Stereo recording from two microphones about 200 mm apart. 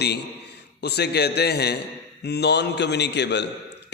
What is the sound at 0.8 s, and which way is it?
A man's voice, 55° left (ahead or behind).